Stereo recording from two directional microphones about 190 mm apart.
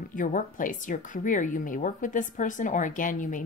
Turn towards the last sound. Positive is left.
turn(degrees=45)  # may be behind; listen again after turning